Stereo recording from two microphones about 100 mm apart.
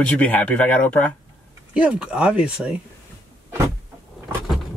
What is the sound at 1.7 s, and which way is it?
Speech, 10° right (ahead or behind).